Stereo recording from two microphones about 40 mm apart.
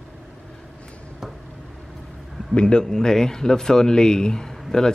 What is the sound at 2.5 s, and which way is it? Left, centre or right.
Speech, left.